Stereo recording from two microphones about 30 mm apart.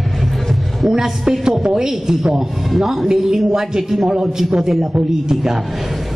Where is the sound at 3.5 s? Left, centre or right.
Centre.